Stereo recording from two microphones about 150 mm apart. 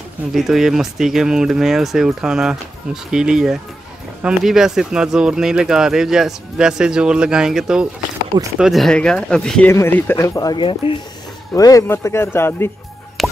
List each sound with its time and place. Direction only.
0.3 s speech: centre (ahead or behind); by 12.7 s 15° left (ahead or behind)
13.2 s music: centre (ahead or behind)